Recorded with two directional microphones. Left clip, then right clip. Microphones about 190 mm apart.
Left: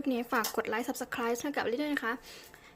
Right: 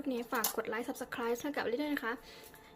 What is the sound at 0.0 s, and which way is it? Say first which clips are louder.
A woman's voice: left 4 dB; 25° left (ahead or behind).